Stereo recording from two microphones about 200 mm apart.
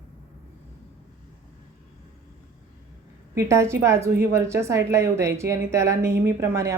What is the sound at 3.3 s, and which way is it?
Speech, 15° right (ahead or behind).